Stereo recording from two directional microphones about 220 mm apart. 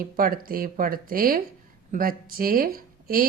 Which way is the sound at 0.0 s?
40° right (ahead or behind).